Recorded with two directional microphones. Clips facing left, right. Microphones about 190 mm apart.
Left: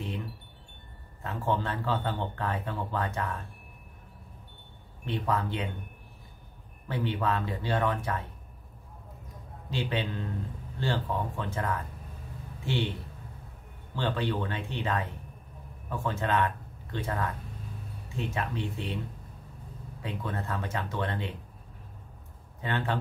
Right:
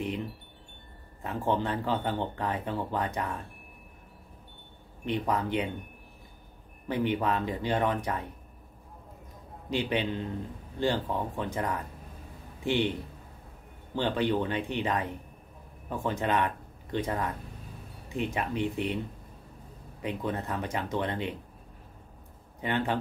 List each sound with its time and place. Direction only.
0.0 s speech: 15° right (ahead or behind)
5.0 s speech: 15° right (ahead or behind)
6.9 s speech: 15° right (ahead or behind)
9.7 s speech: 15° right (ahead or behind)
13.9 s speech: 15° right (ahead or behind)
20.0 s speech: 15° right (ahead or behind)
22.6 s speech: 15° right (ahead or behind)